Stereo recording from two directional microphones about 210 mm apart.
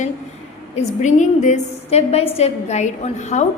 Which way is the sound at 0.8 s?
35° left (ahead or behind).